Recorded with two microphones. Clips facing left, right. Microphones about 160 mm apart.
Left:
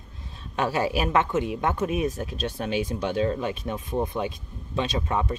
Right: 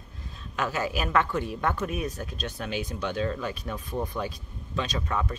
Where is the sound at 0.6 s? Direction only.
30° left (ahead or behind).